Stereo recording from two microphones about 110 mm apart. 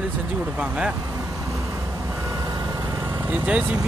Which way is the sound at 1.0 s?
25° right (ahead or behind).